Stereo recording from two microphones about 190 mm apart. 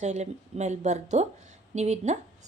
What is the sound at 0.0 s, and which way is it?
Speech, 35° right (ahead or behind).